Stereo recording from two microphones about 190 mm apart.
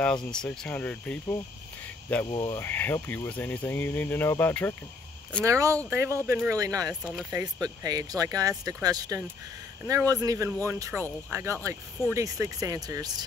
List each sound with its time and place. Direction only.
0.0 s speech: 5° left (ahead or behind)
2.2 s cricket: 25° left (ahead or behind)
2.6 s speech: 10° left (ahead or behind)
5.4 s speech: 15° right (ahead or behind)
6.9 s speech: 5° right (ahead or behind)
7.8 s speech: 20° right (ahead or behind)